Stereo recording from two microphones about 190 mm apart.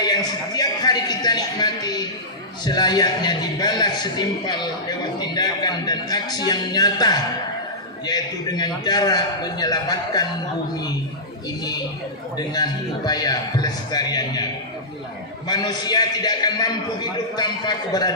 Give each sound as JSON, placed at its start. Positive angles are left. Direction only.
{"t": 0.0, "sound": "a man's voice", "side_deg": 20}
{"t": 13.1, "sound": "a man's voice", "side_deg": 20}
{"t": 15.4, "sound": "a man's voice", "side_deg": 20}